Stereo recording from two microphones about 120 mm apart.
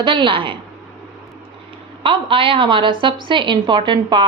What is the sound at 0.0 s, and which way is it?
Speech, 40° right (ahead or behind).